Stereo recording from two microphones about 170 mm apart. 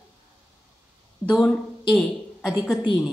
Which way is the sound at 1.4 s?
Centre (ahead or behind).